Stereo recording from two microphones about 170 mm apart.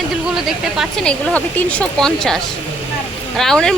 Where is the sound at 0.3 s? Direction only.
Centre (ahead or behind).